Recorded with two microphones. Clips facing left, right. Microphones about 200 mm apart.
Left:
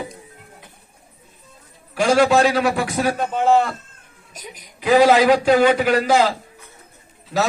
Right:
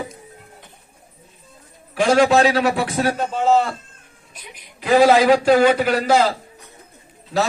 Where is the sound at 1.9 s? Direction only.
5° left (ahead or behind).